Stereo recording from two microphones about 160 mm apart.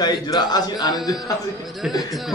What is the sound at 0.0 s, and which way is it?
A man's voice, 25° left (ahead or behind).